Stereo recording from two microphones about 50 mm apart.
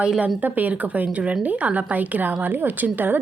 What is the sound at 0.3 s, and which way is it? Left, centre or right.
A woman's voice, right.